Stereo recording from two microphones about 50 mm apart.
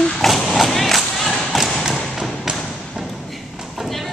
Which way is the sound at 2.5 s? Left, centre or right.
Centre.